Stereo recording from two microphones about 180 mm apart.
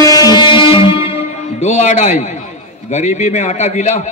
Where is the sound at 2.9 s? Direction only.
40° left (ahead or behind).